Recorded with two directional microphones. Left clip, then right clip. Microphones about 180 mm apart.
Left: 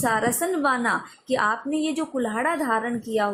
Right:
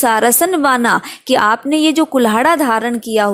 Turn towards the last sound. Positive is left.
turn(degrees=-45)  # may be behind; listen again after turning